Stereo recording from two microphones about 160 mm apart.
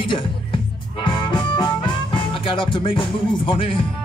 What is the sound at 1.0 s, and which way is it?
Music, 30° left (ahead or behind).